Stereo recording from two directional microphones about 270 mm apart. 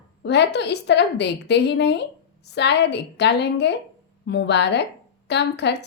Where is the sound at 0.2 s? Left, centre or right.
Left.